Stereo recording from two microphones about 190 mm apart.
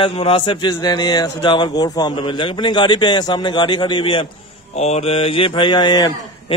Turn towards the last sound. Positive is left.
turn(degrees=20)  # may be behind; listen again after turning